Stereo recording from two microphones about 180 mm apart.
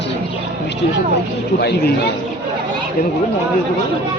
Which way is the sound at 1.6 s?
65° left (ahead or behind).